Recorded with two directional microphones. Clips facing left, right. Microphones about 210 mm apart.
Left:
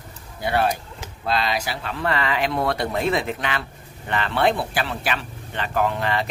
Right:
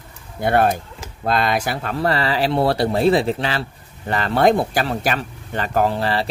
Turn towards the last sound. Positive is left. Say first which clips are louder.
# right 3 dB
turn(degrees=-35)  # may be behind; listen again after turning